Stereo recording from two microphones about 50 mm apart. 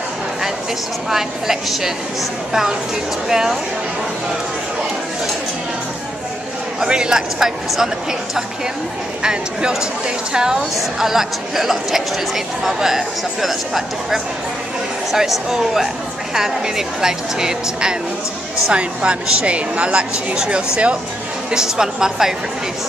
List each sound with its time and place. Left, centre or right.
1.1 s a woman's voice: centre
3.3 s a woman's voice: centre
6.8 s a woman's voice: centre
9.2 s a woman's voice: centre